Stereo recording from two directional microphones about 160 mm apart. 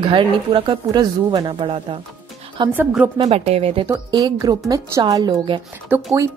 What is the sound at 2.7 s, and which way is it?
Speech, 10° right (ahead or behind).